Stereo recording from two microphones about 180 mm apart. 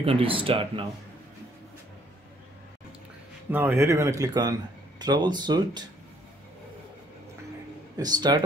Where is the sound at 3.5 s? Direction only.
10° right (ahead or behind).